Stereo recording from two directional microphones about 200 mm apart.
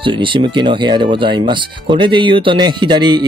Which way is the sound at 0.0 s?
25° right (ahead or behind).